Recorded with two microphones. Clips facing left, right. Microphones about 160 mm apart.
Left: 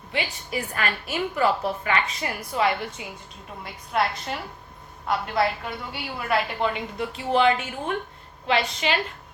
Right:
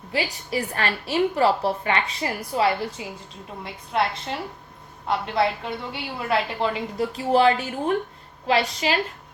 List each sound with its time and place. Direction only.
0.1 s a woman's voice: 35° right (ahead or behind)